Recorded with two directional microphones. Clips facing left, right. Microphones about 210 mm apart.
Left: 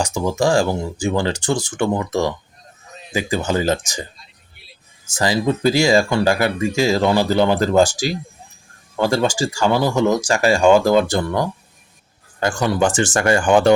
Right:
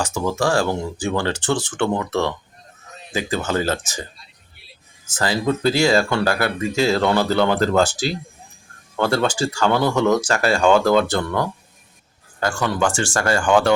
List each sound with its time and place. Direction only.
0.0 s speech: 15° left (ahead or behind)
5.1 s speech: 15° left (ahead or behind)